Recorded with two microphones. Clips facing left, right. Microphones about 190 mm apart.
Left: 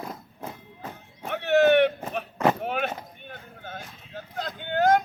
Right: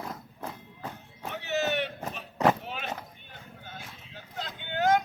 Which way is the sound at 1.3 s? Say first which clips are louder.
Left 10 dB; 60° left (ahead or behind).